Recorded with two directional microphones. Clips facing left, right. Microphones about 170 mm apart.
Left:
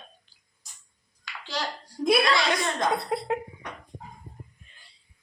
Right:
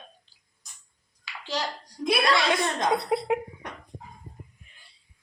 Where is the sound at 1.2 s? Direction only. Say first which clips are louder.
Right 2 dB; 10° right (ahead or behind).